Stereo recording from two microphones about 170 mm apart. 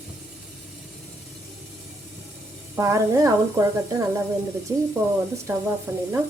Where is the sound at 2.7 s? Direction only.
15° right (ahead or behind).